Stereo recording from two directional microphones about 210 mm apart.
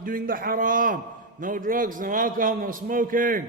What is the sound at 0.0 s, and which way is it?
A man's voice, 40° right (ahead or behind).